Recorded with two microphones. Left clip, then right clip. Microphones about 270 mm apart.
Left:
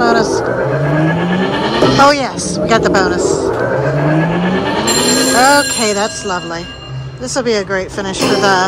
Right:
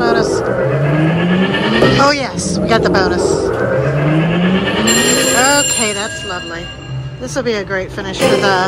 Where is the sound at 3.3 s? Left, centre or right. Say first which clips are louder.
Even; centre.